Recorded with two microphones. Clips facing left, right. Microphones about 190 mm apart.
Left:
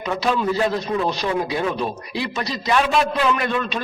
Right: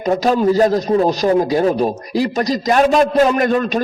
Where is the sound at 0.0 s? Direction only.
40° right (ahead or behind).